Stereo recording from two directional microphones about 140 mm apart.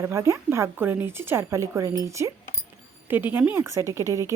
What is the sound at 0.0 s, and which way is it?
A woman's voice, 20° right (ahead or behind).